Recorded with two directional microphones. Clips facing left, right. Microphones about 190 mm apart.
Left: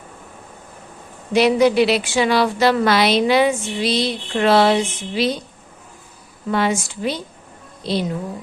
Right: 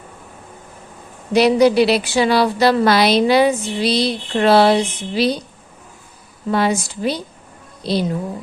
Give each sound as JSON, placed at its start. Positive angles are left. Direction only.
{"t": 1.3, "sound": "a woman's voice", "side_deg": -35}
{"t": 6.5, "sound": "a woman's voice", "side_deg": -35}